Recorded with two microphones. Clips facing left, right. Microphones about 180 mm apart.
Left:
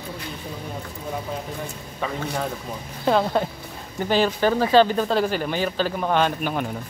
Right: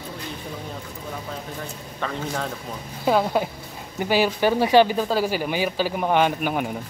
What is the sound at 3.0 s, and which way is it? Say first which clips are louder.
Speech: even; 10° right (ahead or behind).